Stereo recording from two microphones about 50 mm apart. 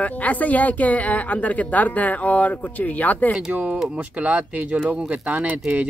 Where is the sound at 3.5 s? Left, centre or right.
Right.